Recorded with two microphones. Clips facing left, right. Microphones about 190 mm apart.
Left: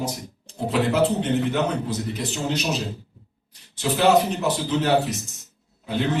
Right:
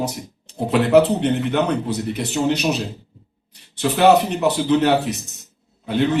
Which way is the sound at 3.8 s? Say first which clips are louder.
Right 4 dB; 65° right (ahead or behind).